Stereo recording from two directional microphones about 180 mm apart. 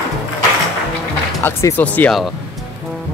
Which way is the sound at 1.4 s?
10° left (ahead or behind).